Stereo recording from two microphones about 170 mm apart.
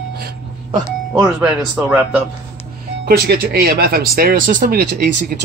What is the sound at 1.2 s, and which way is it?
Speech, 5° right (ahead or behind).